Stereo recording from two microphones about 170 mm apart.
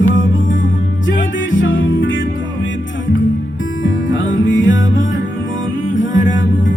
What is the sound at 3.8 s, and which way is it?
Music, 90° left.